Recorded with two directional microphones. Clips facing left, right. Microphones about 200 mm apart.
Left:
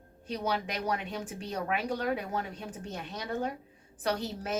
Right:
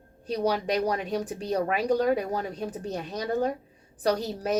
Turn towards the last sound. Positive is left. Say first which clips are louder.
# right 6 dB
turn(degrees=-35)  # may be behind; listen again after turning